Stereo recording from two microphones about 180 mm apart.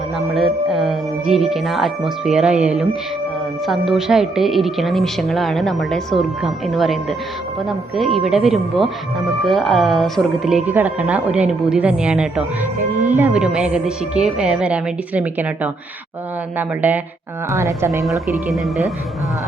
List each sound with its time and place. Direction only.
0.3 s a woman's voice: centre (ahead or behind); by 18.0 s 15° right (ahead or behind)
18.5 s speech: centre (ahead or behind)